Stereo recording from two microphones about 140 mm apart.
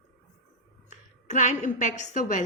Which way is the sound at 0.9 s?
65° left (ahead or behind).